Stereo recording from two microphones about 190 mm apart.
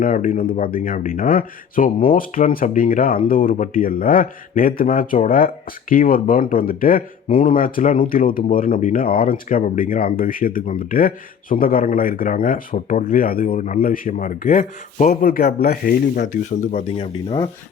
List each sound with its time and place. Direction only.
0.0 s speech: 45° left (ahead or behind)